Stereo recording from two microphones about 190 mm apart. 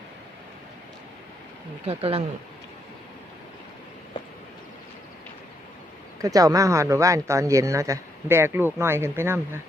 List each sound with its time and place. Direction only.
1.9 s speech: 30° right (ahead or behind)
6.2 s speech: 20° right (ahead or behind)